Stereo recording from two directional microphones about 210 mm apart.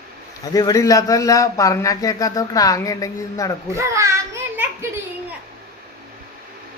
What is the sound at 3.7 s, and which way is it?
A child's voice, 15° right (ahead or behind).